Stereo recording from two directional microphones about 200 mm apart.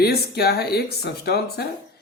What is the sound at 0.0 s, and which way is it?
Speech, 50° left (ahead or behind).